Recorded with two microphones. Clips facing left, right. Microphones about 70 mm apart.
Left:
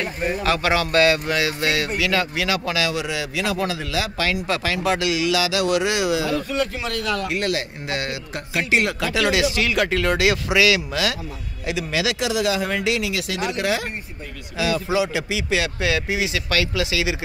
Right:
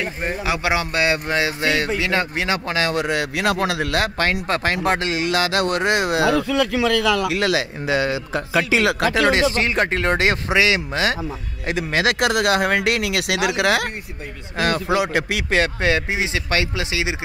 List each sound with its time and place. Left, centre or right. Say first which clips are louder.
0.4 s speech: left 1 dB; centre; by 6.2 s right
6.2 s a man's voice: right 5 dB; right
9.2 s speech: right 1 dB; right
11.6 s speech: right 3 dB; right
14.6 s speech: right 2 dB; right
15.6 s speech: right 3 dB; right